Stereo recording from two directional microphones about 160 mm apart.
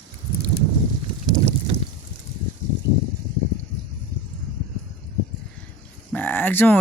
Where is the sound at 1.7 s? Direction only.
35° right (ahead or behind).